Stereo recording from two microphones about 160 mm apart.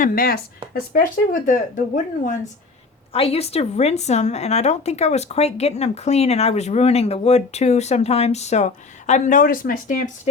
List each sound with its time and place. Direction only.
0.0 s a woman's voice: 65° left (ahead or behind)
3.1 s a woman's voice: 35° left (ahead or behind); by 10.0 s 55° left (ahead or behind)